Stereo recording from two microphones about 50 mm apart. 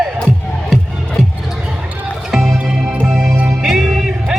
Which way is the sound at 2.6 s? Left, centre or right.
Right.